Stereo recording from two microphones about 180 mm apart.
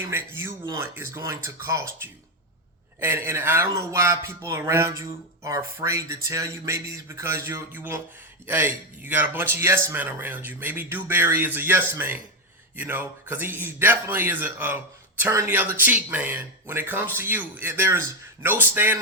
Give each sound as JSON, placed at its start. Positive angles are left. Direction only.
{"t": 0.1, "sound": "speech", "side_deg": -15}
{"t": 3.0, "sound": "speech", "side_deg": -10}